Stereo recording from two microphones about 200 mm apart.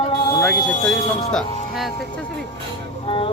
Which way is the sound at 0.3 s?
15° left (ahead or behind).